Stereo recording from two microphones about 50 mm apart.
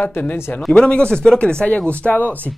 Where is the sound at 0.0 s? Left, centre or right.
Left.